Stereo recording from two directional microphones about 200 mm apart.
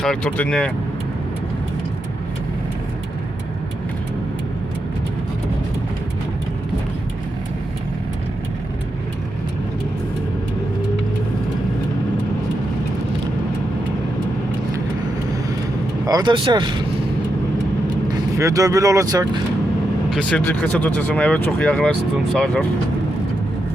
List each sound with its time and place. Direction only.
0.0 s speech: 5° left (ahead or behind)
16.0 s speech: 20° right (ahead or behind)
18.3 s speech: 15° right (ahead or behind)
20.1 s speech: 5° left (ahead or behind)